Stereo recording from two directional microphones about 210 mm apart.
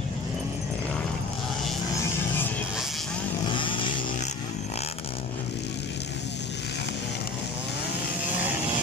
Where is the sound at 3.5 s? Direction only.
25° left (ahead or behind).